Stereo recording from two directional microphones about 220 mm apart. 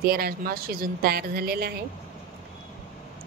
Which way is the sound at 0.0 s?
45° right (ahead or behind).